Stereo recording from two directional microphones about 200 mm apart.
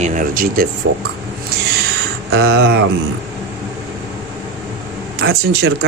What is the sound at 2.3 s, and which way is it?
Speech, 60° right (ahead or behind).